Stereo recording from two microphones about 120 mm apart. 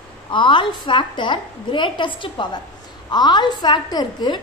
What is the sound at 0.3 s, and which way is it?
A woman's voice, 45° left (ahead or behind).